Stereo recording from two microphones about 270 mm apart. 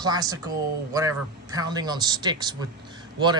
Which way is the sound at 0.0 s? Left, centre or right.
Centre.